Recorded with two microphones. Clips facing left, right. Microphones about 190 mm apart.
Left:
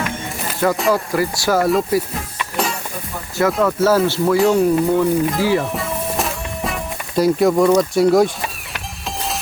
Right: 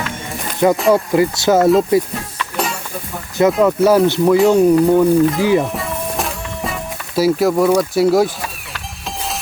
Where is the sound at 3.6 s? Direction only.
15° right (ahead or behind).